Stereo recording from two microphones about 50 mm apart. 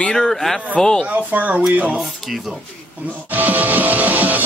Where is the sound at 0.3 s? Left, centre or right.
Centre.